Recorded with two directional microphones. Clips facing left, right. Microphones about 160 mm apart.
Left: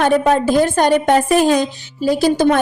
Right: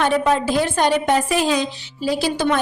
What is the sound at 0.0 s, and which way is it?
A woman's voice, 45° left (ahead or behind).